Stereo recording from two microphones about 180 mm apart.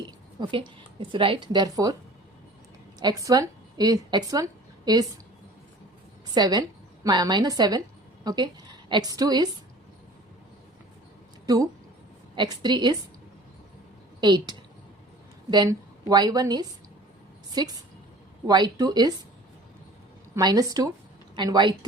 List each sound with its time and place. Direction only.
0.3 s speech: 25° right (ahead or behind)
3.0 s speech: 20° right (ahead or behind)
6.3 s a woman's voice: 20° right (ahead or behind)
11.4 s speech: 20° right (ahead or behind)
14.2 s a woman's voice: 25° right (ahead or behind)
20.3 s speech: 20° right (ahead or behind)